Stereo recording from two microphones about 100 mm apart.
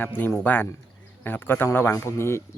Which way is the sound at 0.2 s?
25° left (ahead or behind).